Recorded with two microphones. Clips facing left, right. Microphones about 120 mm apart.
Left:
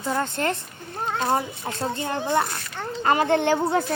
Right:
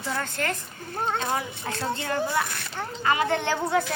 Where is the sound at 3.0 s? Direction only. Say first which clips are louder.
Left 3 dB; 40° left (ahead or behind).